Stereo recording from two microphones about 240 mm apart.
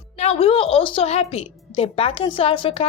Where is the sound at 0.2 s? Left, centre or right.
Left.